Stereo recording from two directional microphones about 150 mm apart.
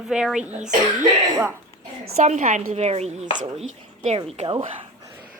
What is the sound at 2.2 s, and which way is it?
Chopping, 50° right (ahead or behind).